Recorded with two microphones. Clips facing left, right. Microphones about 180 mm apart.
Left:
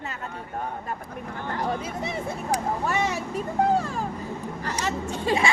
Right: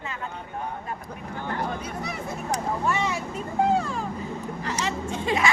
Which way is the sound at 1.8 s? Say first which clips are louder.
Left 2 dB; 25° left (ahead or behind).